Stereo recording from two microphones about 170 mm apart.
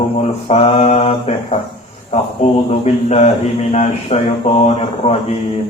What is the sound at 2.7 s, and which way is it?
Speech, 40° left (ahead or behind).